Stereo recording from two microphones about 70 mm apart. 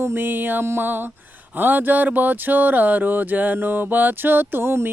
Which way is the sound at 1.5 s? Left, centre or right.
Right.